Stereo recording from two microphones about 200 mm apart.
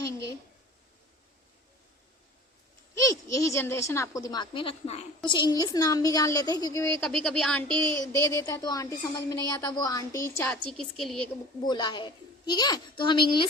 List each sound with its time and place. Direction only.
0.0 s a sound: 15° left (ahead or behind)
2.9 s a woman's voice: 15° left (ahead or behind)
7.8 s speech: 15° left (ahead or behind)
11.6 s a child's voice: 20° left (ahead or behind)